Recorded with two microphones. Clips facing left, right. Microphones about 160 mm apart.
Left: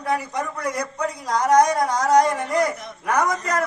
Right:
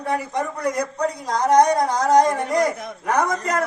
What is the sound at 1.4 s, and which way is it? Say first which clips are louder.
Speech: right 1 dB; 30° right (ahead or behind).